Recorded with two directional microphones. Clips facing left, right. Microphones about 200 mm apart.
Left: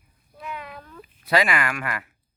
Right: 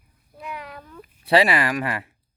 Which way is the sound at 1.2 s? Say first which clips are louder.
Right 4 dB; 30° right (ahead or behind).